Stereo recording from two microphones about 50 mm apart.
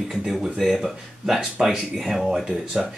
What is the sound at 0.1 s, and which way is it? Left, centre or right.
Speech, centre.